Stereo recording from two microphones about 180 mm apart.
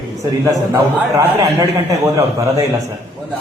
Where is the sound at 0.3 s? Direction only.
20° right (ahead or behind).